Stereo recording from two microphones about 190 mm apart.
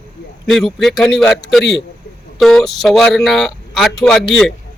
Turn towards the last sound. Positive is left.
turn(degrees=5)  # may be behind; listen again after turning